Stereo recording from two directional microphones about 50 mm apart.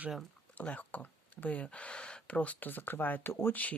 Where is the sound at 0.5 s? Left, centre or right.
Left.